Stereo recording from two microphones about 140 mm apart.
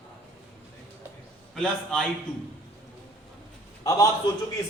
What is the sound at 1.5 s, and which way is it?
Speech, 5° left (ahead or behind).